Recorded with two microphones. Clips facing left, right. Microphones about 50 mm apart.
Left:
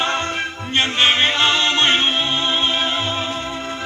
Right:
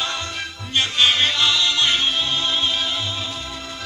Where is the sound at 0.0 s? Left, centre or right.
Left.